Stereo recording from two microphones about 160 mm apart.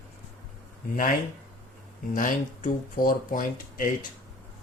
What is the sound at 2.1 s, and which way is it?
Speech, 55° left (ahead or behind).